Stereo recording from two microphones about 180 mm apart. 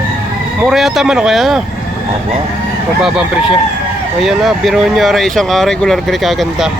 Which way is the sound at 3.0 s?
5° right (ahead or behind).